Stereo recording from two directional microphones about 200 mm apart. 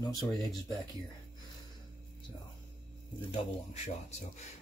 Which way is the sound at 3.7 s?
35° left (ahead or behind).